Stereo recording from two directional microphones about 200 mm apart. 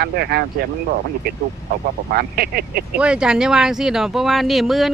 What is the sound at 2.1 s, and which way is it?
Speech, 50° right (ahead or behind).